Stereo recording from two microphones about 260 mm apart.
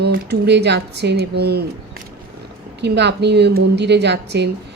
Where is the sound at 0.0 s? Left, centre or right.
Right.